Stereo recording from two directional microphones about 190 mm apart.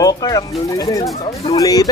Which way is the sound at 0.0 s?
20° left (ahead or behind).